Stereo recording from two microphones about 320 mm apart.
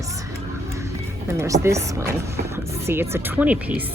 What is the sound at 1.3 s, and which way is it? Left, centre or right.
Speech, centre.